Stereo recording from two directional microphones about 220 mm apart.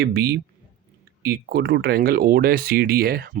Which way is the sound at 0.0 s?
45° right (ahead or behind).